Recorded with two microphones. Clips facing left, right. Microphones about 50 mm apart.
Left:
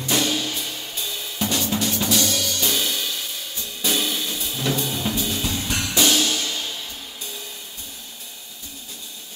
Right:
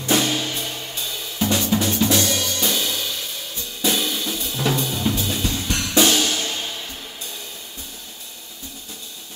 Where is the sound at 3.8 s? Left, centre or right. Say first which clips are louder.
Right 2 dB; centre.